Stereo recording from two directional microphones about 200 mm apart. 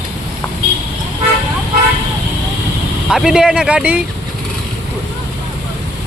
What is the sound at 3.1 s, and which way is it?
Speech, centre (ahead or behind).